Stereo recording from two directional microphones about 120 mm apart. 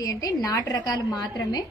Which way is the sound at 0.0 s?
30° left (ahead or behind).